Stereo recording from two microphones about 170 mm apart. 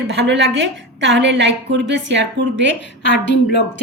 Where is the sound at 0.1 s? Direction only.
90° right.